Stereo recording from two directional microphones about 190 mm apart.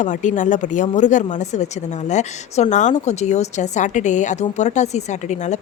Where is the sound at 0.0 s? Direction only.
40° left (ahead or behind).